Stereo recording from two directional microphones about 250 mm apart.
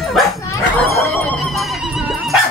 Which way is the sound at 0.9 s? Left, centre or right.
Centre.